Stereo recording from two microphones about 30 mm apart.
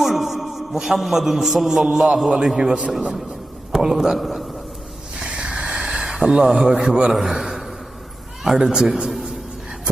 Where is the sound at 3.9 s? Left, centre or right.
Centre.